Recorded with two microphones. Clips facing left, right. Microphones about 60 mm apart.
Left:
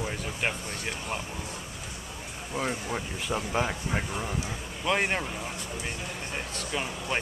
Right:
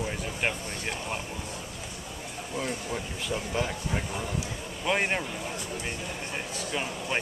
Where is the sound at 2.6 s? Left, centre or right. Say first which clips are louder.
Left 2 dB; centre.